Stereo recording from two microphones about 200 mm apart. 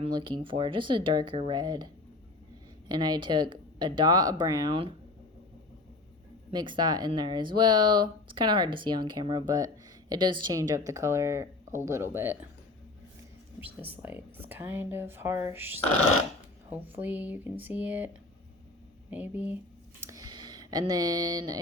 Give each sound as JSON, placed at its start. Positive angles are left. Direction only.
{"t": 0.0, "sound": "speech", "side_deg": -25}
{"t": 2.9, "sound": "speech", "side_deg": -20}
{"t": 6.5, "sound": "a woman's voice", "side_deg": -20}
{"t": 13.6, "sound": "speech", "side_deg": -10}
{"t": 19.1, "sound": "speech", "side_deg": -10}
{"t": 20.0, "sound": "a sound", "side_deg": -15}